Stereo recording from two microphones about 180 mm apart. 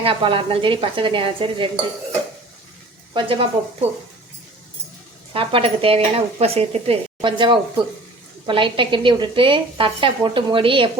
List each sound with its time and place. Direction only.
0.0 s speech: 30° right (ahead or behind)
3.2 s speech: 30° right (ahead or behind)
5.3 s speech: 30° right (ahead or behind)